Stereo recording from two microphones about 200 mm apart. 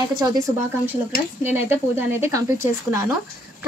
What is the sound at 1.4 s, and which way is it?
Speech, 10° right (ahead or behind).